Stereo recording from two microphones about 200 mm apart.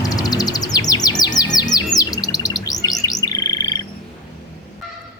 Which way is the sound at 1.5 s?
20° left (ahead or behind).